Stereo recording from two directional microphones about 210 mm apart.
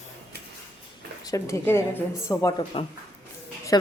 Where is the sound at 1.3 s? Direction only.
15° left (ahead or behind).